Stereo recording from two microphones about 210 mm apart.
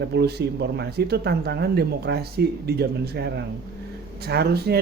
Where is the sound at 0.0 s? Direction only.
55° right (ahead or behind).